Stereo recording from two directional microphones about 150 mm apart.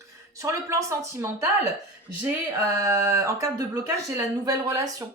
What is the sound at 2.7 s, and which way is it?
Speech, 20° right (ahead or behind).